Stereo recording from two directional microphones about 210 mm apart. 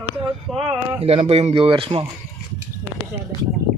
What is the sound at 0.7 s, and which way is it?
Speech, 25° right (ahead or behind).